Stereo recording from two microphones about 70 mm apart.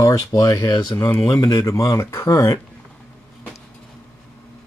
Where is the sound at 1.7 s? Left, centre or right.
Left.